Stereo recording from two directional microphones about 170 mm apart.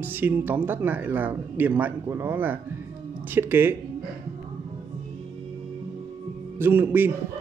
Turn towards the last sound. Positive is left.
turn(degrees=-15)  # may be behind; listen again after turning